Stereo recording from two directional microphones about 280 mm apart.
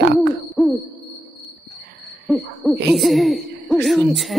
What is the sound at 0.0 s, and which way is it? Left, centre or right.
Hoot, right.